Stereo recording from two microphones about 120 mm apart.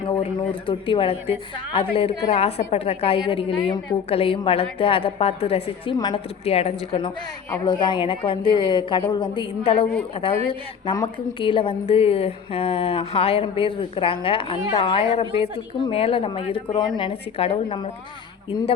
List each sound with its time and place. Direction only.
0.1 s a woman's voice: 45° left (ahead or behind)
6.4 s a woman's voice: 60° left (ahead or behind)